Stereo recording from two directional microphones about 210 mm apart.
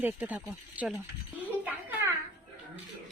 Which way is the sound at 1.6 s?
10° right (ahead or behind).